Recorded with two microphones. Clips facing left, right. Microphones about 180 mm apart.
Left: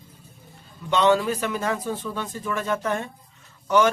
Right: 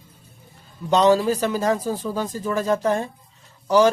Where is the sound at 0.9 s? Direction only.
35° right (ahead or behind).